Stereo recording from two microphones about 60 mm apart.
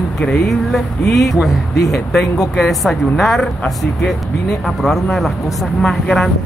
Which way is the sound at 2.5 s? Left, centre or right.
Centre.